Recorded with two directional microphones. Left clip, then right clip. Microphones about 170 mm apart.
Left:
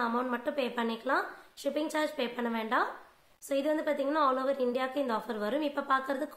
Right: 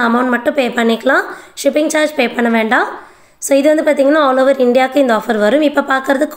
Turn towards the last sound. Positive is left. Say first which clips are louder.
# right 17 dB
turn(degrees=-20)  # may be behind; listen again after turning